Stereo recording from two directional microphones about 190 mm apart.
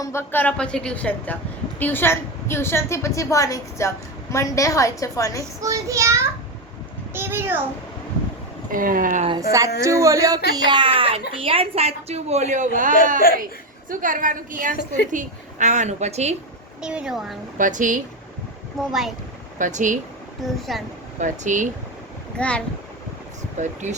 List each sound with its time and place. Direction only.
0.0 s a woman's voice: 15° left (ahead or behind)
5.6 s a child's voice: 15° right (ahead or behind)
8.7 s a woman's voice: 45° right (ahead or behind)
9.4 s a child's voice: 15° right (ahead or behind); by 16.3 s 35° right (ahead or behind)
16.8 s speech: 5° right (ahead or behind)
17.6 s a woman's voice: 40° right (ahead or behind)
18.8 s speech: centre (ahead or behind)
19.5 s a woman's voice: 40° right (ahead or behind)
20.6 s speech: centre (ahead or behind)
21.2 s a woman's voice: 40° right (ahead or behind)
22.4 s a woman's voice: 5° left (ahead or behind)
23.8 s a woman's voice: 40° right (ahead or behind)